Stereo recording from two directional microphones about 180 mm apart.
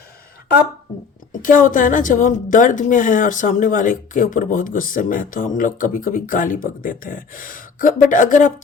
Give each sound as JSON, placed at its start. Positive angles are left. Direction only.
{"t": 1.3, "sound": "a woman's voice", "side_deg": 45}